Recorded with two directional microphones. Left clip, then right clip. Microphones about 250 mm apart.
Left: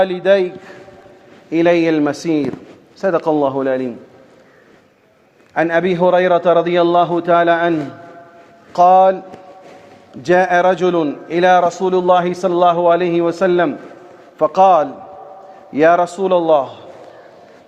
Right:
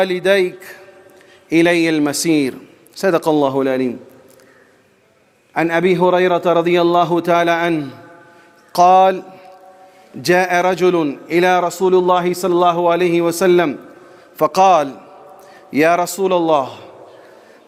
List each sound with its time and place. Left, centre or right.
0.0 s a man's voice: right
5.5 s a man's voice: right
10.2 s a man's voice: right